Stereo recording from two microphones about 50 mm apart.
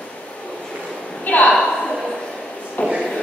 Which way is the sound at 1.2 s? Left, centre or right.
Left.